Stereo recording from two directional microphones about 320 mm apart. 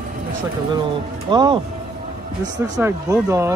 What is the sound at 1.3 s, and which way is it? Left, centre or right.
Speech, centre.